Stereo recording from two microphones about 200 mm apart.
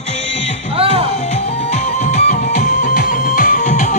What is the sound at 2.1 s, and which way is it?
Music, 40° left (ahead or behind).